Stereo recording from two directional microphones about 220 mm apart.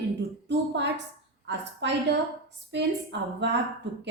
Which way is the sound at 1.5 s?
50° right (ahead or behind).